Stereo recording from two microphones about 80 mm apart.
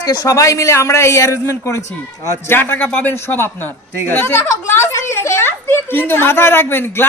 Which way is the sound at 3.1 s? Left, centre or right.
Left.